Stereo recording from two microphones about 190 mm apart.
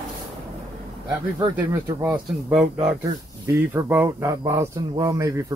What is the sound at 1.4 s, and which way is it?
Speech, 20° right (ahead or behind).